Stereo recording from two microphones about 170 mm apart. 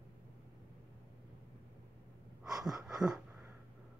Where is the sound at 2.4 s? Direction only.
Centre (ahead or behind).